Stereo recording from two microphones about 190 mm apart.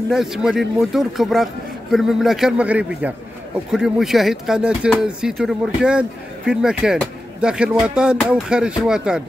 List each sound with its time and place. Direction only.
0.1 s speech: centre (ahead or behind)